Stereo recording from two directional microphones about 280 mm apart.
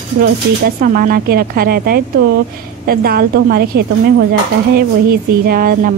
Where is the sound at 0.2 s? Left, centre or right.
Right.